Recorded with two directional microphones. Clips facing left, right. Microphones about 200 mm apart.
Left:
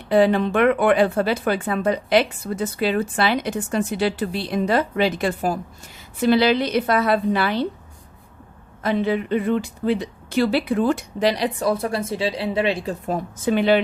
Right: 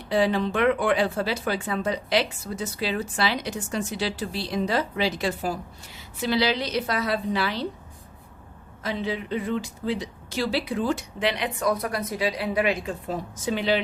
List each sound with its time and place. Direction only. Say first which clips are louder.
0.1 s speech: left 6 dB; 55° left (ahead or behind)
8.8 s speech: left 8 dB; 55° left (ahead or behind)
11.2 s speech: left 6 dB; 35° left (ahead or behind)
13.1 s speech: left 7 dB; 55° left (ahead or behind)